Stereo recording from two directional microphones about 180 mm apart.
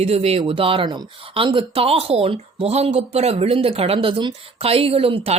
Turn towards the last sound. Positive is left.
turn(degrees=-30)  # may be behind; listen again after turning